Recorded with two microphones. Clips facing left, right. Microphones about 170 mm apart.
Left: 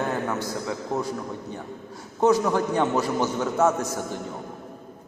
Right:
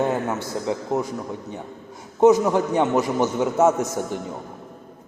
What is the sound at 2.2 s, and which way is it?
A man's voice, 20° right (ahead or behind).